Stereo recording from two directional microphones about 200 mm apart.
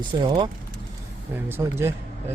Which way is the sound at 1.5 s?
10° right (ahead or behind).